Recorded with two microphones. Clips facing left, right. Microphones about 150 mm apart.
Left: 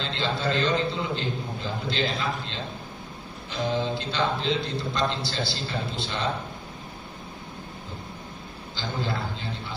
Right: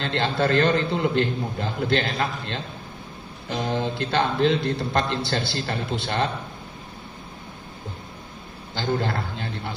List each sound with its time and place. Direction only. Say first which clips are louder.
0.0 s speech: right 5 dB; 55° right (ahead or behind)
8.7 s a man's voice: right 6 dB; 60° right (ahead or behind)